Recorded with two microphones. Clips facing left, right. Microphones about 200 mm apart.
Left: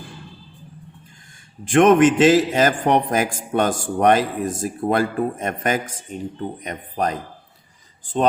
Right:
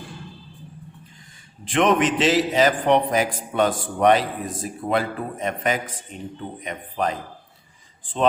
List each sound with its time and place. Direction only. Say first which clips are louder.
1.6 s a man's voice: left 6 dB; 50° left (ahead or behind)